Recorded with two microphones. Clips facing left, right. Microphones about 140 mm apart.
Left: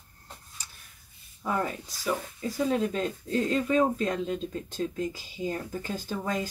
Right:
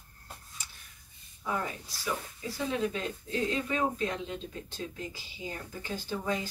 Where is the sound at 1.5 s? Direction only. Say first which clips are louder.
Left 5 dB; 45° left (ahead or behind).